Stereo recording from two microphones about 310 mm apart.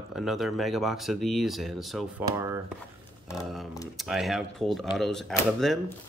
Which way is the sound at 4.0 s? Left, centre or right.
Centre.